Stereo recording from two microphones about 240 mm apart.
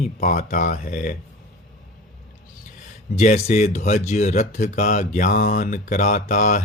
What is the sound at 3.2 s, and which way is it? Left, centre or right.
Speech, left.